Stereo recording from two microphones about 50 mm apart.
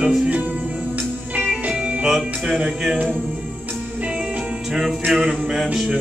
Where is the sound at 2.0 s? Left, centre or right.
Centre.